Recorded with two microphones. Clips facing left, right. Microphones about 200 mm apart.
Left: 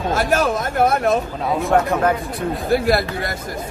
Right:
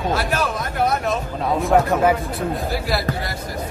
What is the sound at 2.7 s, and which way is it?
Speech, 55° left (ahead or behind).